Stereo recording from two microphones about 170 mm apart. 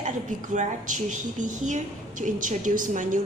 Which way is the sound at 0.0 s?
45° right (ahead or behind).